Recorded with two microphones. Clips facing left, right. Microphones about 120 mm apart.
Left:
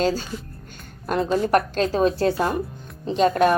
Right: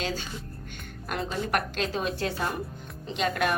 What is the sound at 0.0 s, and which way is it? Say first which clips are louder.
A woman's voice: left 10 dB; 40° left (ahead or behind).